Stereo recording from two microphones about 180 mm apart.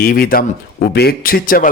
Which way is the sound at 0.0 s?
55° left (ahead or behind).